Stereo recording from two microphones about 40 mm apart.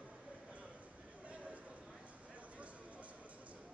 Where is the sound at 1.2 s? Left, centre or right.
Right.